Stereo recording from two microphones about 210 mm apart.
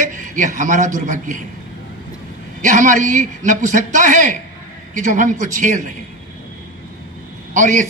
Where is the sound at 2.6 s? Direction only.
40° right (ahead or behind).